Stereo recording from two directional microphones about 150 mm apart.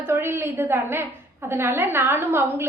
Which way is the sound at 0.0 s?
15° right (ahead or behind).